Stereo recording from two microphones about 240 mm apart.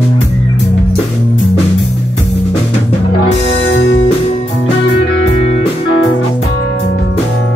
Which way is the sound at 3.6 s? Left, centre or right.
Left.